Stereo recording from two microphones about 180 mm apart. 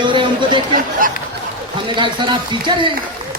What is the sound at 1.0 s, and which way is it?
Speech, 50° right (ahead or behind).